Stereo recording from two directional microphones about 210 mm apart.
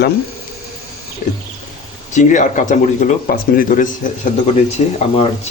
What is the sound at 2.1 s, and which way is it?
Speech, 35° left (ahead or behind).